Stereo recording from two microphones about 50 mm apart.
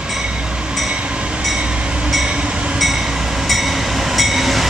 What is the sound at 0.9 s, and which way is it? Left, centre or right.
Train, right.